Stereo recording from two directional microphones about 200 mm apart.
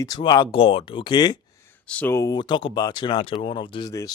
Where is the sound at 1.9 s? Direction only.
10° left (ahead or behind).